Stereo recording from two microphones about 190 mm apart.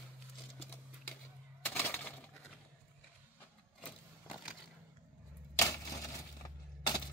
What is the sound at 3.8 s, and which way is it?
Vehicle, 5° right (ahead or behind).